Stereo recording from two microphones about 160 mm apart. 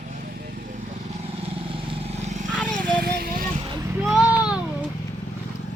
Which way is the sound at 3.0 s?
70° right (ahead or behind).